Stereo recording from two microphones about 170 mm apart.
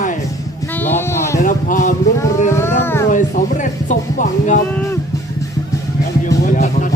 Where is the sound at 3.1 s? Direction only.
50° left (ahead or behind).